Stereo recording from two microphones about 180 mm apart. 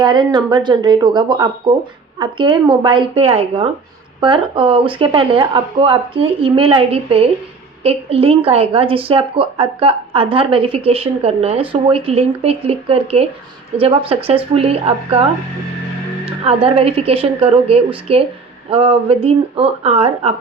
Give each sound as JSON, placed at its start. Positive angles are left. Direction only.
{"t": 0.0, "sound": "a woman's voice", "side_deg": -25}
{"t": 16.2, "sound": "a woman's voice", "side_deg": -30}